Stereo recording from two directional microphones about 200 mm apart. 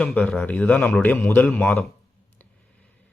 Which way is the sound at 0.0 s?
5° left (ahead or behind).